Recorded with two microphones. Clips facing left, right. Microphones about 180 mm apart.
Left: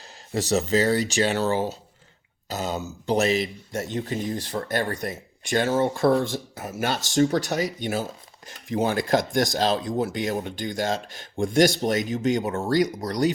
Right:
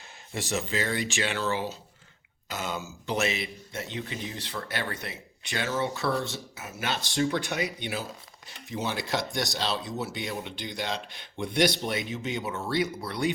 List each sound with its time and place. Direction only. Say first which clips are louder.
0.3 s speech: left 8 dB; 40° left (ahead or behind)